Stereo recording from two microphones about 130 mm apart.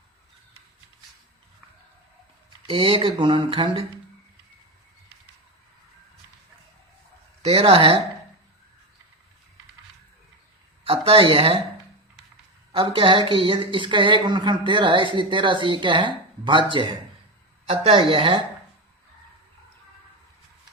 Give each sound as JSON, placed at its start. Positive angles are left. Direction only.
{"t": 2.6, "sound": "a woman's voice", "side_deg": -40}
{"t": 7.4, "sound": "a woman's voice", "side_deg": -50}
{"t": 10.8, "sound": "a woman's voice", "side_deg": -50}
{"t": 12.7, "sound": "a woman's voice", "side_deg": -45}
{"t": 17.7, "sound": "a woman's voice", "side_deg": -50}